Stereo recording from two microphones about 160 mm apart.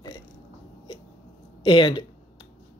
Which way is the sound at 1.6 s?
30° left (ahead or behind).